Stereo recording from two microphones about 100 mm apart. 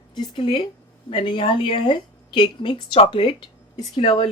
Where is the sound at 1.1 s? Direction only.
60° left (ahead or behind).